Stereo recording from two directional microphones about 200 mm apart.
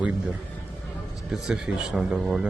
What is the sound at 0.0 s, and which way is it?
A man's voice, 5° right (ahead or behind).